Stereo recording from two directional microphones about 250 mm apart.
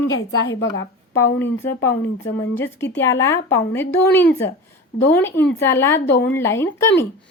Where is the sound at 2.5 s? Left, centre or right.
Centre.